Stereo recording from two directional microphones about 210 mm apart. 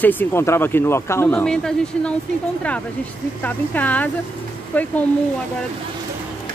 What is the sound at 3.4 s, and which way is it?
Speech, 5° left (ahead or behind).